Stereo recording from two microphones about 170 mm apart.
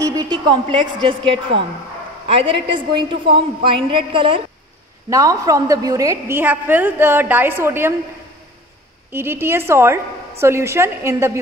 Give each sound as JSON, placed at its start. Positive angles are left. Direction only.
{"t": 0.0, "sound": "a woman's voice", "side_deg": -20}
{"t": 5.1, "sound": "a woman's voice", "side_deg": -20}
{"t": 9.1, "sound": "a woman's voice", "side_deg": -15}